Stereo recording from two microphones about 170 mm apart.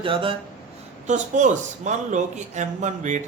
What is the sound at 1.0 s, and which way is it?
A man's voice, 45° right (ahead or behind).